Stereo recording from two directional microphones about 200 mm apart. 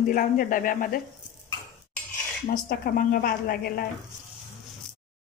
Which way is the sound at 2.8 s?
45° left (ahead or behind).